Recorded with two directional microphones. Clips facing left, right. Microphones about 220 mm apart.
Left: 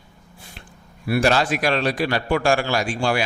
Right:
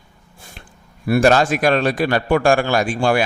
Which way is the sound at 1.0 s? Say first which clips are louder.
Right 5 dB; 45° right (ahead or behind).